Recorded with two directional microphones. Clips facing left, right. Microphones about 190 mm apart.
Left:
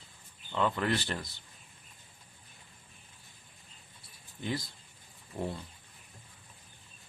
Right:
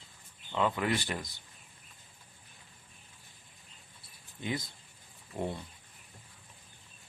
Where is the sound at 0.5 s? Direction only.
10° right (ahead or behind).